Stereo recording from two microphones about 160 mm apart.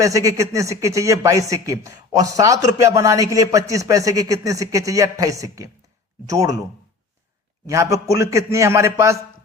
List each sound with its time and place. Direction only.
0.0 s speech: 20° right (ahead or behind)
7.7 s speech: 20° right (ahead or behind)